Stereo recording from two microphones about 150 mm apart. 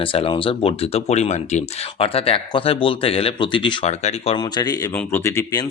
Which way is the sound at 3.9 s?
45° left (ahead or behind).